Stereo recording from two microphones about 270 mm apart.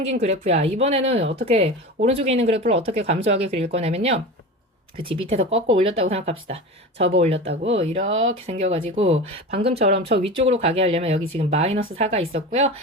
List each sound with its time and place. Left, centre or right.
0.0 s speech: right
5.3 s speech: right